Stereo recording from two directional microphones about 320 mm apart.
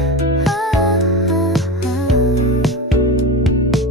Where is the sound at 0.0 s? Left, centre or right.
Centre.